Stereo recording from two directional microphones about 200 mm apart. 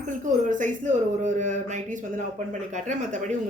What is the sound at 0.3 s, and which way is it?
Speech, 40° right (ahead or behind).